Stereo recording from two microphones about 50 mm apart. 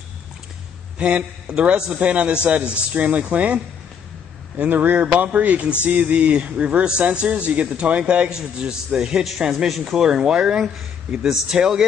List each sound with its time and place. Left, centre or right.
0.9 s a man's voice: right
4.6 s a man's voice: right; by 11.8 s centre